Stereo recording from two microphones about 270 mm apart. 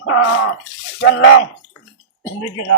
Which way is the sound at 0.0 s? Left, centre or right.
Left.